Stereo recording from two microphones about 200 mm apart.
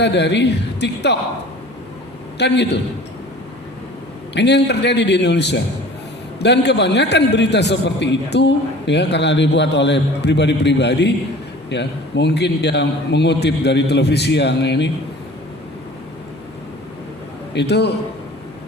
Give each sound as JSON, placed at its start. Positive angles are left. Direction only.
{"t": 0.0, "sound": "a man's voice", "side_deg": 60}
{"t": 2.4, "sound": "a man's voice", "side_deg": 60}
{"t": 4.4, "sound": "a man's voice", "side_deg": 60}
{"t": 17.5, "sound": "a man's voice", "side_deg": 55}